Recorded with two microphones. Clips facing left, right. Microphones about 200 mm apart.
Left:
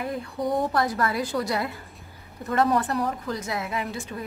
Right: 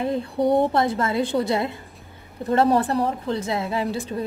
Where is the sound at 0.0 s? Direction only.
30° right (ahead or behind).